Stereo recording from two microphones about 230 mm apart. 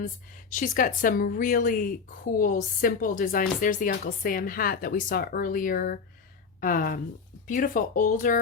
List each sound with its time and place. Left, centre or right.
0.5 s speech: left